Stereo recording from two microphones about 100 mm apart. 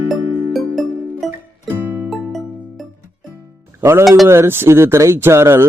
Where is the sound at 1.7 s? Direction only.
20° right (ahead or behind).